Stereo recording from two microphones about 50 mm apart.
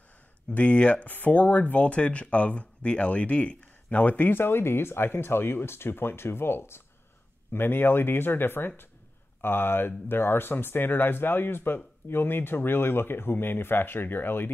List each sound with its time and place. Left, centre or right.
0.6 s speech: left